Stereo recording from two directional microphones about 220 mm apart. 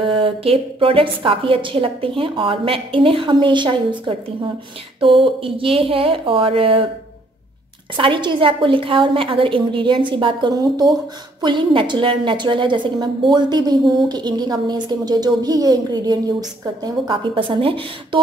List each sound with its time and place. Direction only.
0.0 s a woman's voice: 25° right (ahead or behind)
7.9 s a woman's voice: 20° right (ahead or behind)